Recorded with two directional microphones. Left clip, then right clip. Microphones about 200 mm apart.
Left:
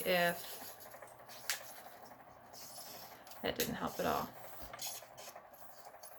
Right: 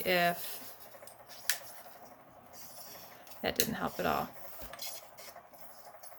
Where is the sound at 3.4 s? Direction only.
45° right (ahead or behind).